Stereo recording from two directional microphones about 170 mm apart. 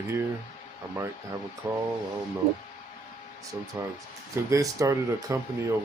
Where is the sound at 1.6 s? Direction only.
25° right (ahead or behind).